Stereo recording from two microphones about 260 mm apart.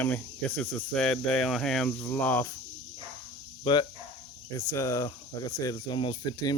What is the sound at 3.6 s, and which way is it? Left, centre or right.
Speech, centre.